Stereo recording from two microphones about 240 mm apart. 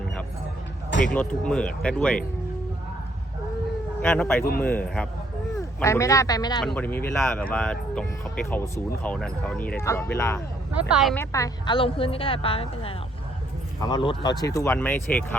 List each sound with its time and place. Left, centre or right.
1.0 s speech: centre
4.0 s speech: centre
10.8 s speech: centre
11.2 s a woman's voice: centre